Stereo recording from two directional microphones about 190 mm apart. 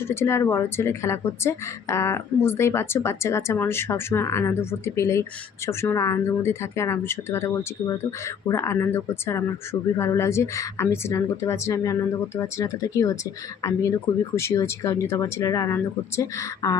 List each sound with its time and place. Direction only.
0.0 s speech: 15° left (ahead or behind)